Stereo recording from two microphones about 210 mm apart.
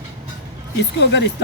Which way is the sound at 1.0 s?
55° left (ahead or behind).